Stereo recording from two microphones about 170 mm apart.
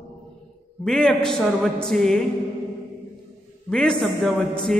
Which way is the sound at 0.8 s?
5° left (ahead or behind).